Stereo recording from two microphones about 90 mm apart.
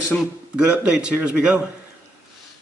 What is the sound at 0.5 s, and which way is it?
A man's voice, 10° right (ahead or behind).